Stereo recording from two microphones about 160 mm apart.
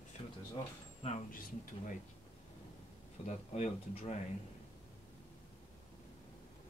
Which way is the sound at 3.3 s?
45° left (ahead or behind).